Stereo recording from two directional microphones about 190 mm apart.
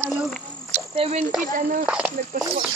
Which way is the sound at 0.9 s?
35° right (ahead or behind).